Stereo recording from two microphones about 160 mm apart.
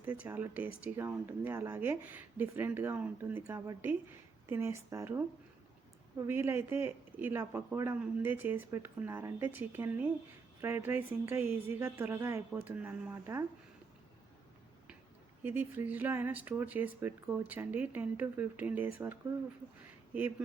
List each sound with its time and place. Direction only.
0.0 s a woman's voice: 10° right (ahead or behind)
15.4 s a woman's voice: 15° right (ahead or behind)